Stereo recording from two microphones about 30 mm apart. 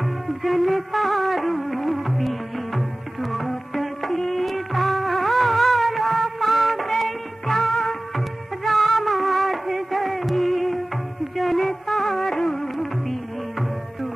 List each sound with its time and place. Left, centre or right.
0.0 s music: centre
7.0 s music of bollywood: centre
8.6 s music: centre